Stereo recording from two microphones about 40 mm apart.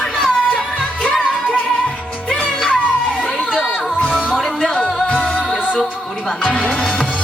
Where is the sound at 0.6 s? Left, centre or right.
Centre.